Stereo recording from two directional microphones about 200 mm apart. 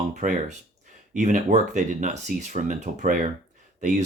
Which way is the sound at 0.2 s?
40° right (ahead or behind).